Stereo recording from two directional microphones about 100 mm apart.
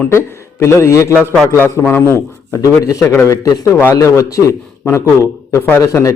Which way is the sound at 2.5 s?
30° left (ahead or behind).